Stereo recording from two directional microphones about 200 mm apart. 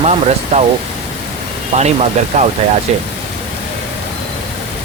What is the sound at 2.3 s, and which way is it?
Speech, 35° right (ahead or behind).